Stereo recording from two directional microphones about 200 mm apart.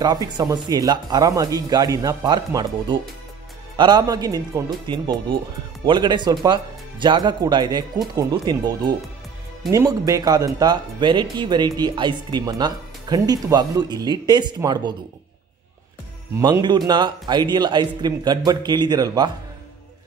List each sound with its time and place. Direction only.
0.0 s speech: 20° right (ahead or behind)
16.3 s speech: 20° right (ahead or behind)